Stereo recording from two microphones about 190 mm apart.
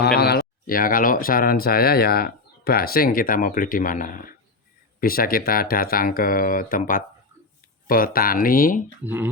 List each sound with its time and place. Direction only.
0.2 s speech: 55° left (ahead or behind)
9.0 s speech: 10° right (ahead or behind)